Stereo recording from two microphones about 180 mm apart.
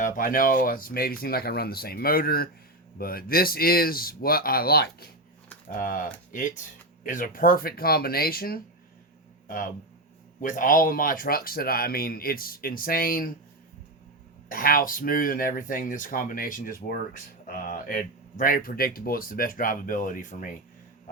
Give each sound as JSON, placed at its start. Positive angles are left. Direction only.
{"t": 0.0, "sound": "speech", "side_deg": 50}
{"t": 5.6, "sound": "speech", "side_deg": 50}
{"t": 10.4, "sound": "speech", "side_deg": 50}
{"t": 14.5, "sound": "speech", "side_deg": 50}